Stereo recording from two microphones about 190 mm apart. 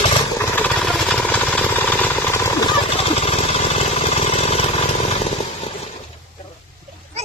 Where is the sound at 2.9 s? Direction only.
30° left (ahead or behind).